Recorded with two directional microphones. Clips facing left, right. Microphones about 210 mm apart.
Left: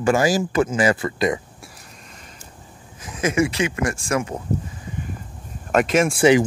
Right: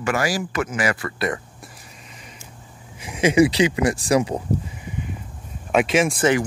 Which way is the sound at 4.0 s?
35° right (ahead or behind).